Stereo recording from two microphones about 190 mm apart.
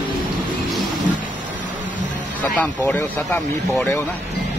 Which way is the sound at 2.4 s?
10° left (ahead or behind).